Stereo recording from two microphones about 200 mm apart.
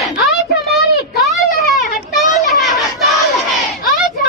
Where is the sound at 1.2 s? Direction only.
Centre (ahead or behind).